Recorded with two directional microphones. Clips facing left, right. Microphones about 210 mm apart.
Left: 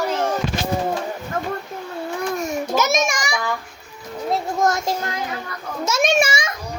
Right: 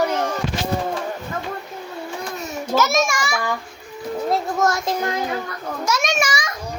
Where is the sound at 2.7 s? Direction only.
20° left (ahead or behind).